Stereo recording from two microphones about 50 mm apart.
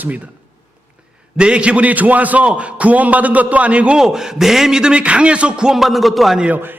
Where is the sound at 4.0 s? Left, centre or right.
Centre.